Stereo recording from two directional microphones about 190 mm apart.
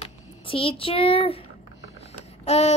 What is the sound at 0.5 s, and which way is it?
Speech, 30° left (ahead or behind).